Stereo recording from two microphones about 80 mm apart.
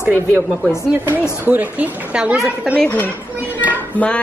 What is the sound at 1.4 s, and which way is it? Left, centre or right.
Speech, right.